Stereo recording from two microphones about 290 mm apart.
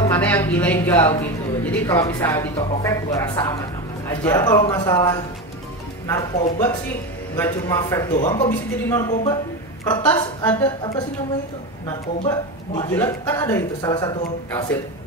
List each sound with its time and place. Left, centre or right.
0.0 s a woman's voice: centre
8.5 s a woman's voice: centre
12.3 s a woman's voice: centre